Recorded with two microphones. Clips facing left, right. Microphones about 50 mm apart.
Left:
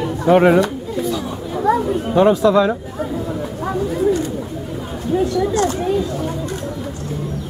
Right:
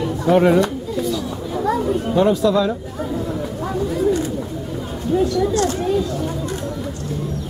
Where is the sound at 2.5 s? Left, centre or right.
Left.